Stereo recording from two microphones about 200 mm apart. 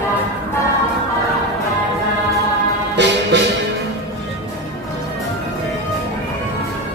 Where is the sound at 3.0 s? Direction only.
60° right (ahead or behind).